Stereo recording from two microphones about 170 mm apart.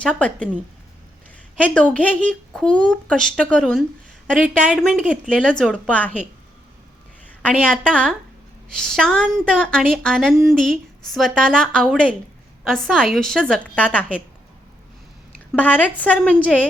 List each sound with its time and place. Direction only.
0.2 s a woman's voice: 5° left (ahead or behind)
1.5 s a woman's voice: 5° left (ahead or behind)
7.4 s speech: 5° left (ahead or behind)
15.5 s a woman's voice: 10° left (ahead or behind)